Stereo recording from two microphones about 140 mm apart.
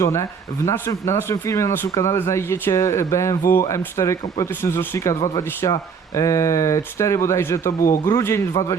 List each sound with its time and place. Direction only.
0.0 s speech: 20° left (ahead or behind)